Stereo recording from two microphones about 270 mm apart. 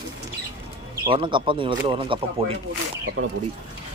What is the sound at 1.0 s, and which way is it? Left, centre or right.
Speech, centre.